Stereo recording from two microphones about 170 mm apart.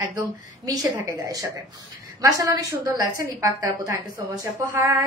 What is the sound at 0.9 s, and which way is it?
A woman's voice, 20° right (ahead or behind).